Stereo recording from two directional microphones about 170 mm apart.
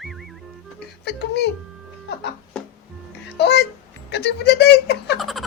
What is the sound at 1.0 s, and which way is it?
Speech, 80° left.